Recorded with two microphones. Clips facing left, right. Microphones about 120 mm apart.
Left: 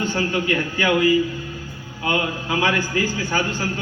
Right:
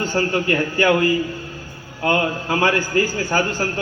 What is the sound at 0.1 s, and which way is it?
A man's voice, 40° right (ahead or behind).